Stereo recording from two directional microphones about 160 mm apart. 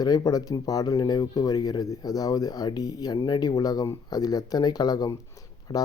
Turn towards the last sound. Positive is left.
turn(degrees=25)  # may be behind; listen again after turning